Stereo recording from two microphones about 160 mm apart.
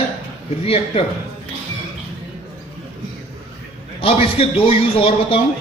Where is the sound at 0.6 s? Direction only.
40° left (ahead or behind).